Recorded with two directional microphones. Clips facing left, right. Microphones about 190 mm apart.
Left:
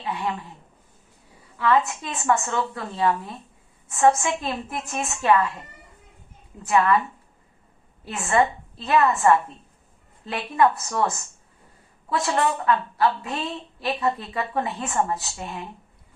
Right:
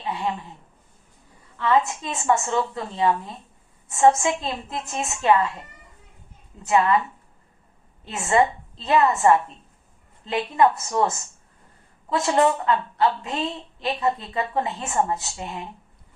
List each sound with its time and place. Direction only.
2.0 s a woman's voice: 20° right (ahead or behind)
6.6 s a woman's voice: 20° right (ahead or behind)
8.1 s a woman's voice: 20° right (ahead or behind)